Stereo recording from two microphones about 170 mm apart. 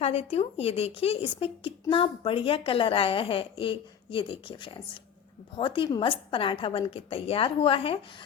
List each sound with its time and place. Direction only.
0.0 s speech: 35° left (ahead or behind)